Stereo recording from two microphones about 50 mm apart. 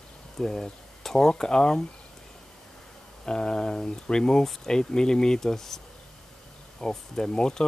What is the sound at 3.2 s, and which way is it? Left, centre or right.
Speech, centre.